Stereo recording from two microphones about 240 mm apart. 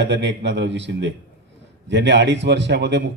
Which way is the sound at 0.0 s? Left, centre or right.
Right.